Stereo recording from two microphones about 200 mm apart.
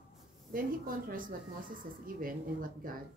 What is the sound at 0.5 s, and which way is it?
Speech, 45° right (ahead or behind).